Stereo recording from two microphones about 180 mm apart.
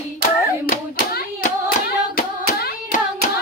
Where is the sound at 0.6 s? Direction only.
45° left (ahead or behind).